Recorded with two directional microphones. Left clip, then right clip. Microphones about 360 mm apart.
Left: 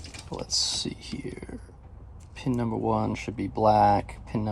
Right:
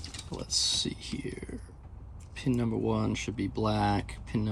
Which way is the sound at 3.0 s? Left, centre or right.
Centre.